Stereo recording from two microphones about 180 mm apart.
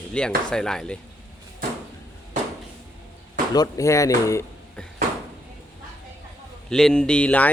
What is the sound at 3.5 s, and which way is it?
Speech, 20° left (ahead or behind).